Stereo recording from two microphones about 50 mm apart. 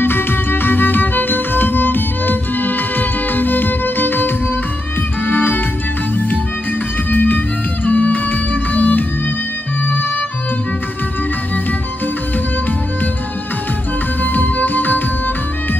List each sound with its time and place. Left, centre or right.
0.0 s music: left
7.1 s music: left
14.2 s music: left